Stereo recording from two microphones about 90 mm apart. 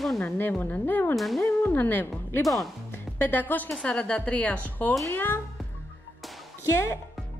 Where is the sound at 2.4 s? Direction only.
Centre (ahead or behind).